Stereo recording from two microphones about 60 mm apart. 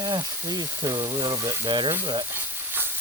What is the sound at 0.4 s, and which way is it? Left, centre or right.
Speech, right.